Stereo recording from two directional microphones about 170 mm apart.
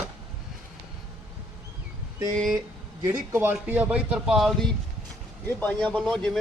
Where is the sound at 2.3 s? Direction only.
Centre (ahead or behind).